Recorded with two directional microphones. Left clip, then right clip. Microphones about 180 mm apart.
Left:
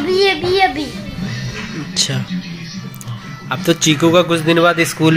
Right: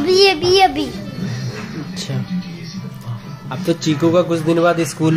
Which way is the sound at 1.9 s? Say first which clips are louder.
Left 12 dB; centre (ahead or behind).